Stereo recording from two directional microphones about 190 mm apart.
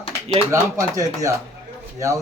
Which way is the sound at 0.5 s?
15° right (ahead or behind).